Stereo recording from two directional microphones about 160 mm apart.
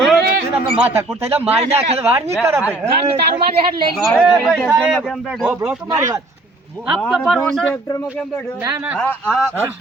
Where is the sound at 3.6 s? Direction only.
30° right (ahead or behind).